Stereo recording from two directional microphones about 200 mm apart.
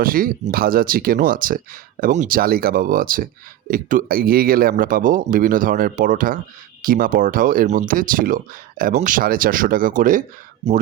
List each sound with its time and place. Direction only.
0.0 s speech: 45° right (ahead or behind)